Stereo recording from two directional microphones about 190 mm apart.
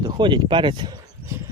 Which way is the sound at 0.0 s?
25° right (ahead or behind).